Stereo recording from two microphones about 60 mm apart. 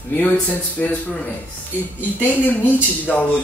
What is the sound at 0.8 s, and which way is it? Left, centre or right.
Speech, left.